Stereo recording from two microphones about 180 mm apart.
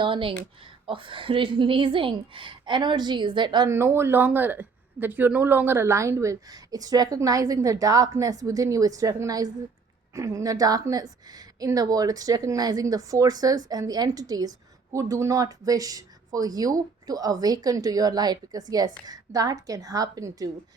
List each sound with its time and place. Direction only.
0.0 s a woman's voice: 30° right (ahead or behind)